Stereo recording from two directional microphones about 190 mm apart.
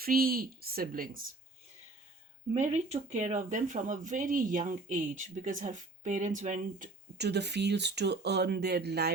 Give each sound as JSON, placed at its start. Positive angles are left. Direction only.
{"t": 0.0, "sound": "speech", "side_deg": -50}
{"t": 2.5, "sound": "speech", "side_deg": -35}
{"t": 7.3, "sound": "speech", "side_deg": -65}